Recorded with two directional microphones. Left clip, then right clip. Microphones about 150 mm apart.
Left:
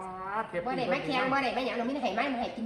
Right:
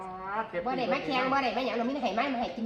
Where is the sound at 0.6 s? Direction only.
20° right (ahead or behind).